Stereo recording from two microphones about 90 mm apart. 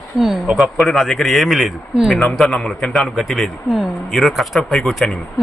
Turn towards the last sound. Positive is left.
turn(degrees=5)  # may be behind; listen again after turning